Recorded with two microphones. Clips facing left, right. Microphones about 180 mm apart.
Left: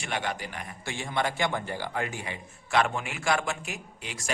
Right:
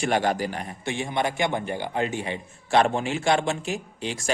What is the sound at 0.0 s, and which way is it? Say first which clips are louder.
Speech: right 9 dB; 40° right (ahead or behind).